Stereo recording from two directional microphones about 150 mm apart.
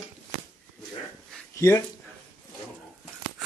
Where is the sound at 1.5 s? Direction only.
20° left (ahead or behind).